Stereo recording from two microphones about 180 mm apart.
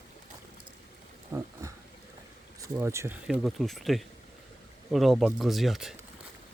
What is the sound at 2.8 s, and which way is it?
Speech, 15° right (ahead or behind).